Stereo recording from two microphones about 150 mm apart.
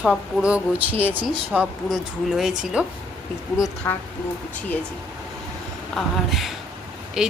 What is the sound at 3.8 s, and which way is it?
Speech, 20° left (ahead or behind).